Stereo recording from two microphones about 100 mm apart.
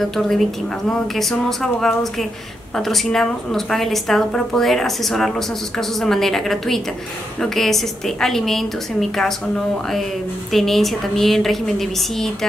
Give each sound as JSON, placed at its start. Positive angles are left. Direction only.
{"t": 0.0, "sound": "a woman's voice", "side_deg": 0}
{"t": 10.5, "sound": "a woman's voice", "side_deg": 5}